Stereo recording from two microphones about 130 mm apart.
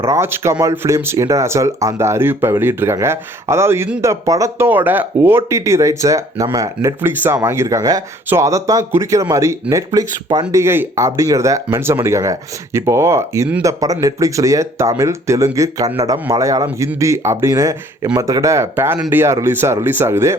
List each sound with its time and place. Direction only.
0.0 s speech: 20° right (ahead or behind)